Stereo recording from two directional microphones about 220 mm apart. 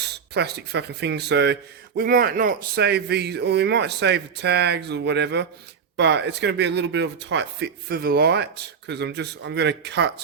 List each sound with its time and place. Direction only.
0.3 s speech: 50° right (ahead or behind)